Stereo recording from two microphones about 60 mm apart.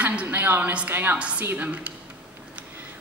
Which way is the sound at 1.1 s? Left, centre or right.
Centre.